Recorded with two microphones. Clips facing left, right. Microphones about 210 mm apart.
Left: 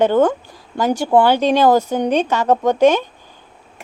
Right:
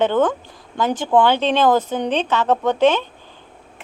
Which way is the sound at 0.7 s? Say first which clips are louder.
Left 2 dB; 10° left (ahead or behind).